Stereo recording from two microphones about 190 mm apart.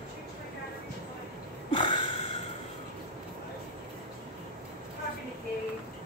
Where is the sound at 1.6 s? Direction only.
25° left (ahead or behind).